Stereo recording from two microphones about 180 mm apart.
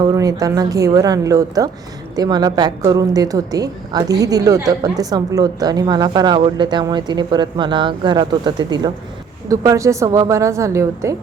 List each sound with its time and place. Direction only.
0.0 s a woman's voice: 20° right (ahead or behind)